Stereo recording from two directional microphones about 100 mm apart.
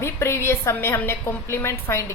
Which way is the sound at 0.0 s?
25° left (ahead or behind).